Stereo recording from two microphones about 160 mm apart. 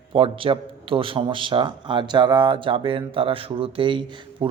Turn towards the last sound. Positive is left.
turn(degrees=-30)  # may be behind; listen again after turning